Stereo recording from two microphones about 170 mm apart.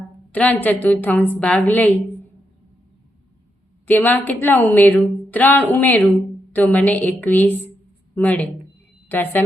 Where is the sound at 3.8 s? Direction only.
10° left (ahead or behind).